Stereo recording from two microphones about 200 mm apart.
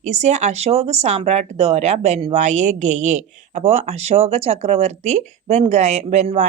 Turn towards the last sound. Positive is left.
turn(degrees=-35)  # may be behind; listen again after turning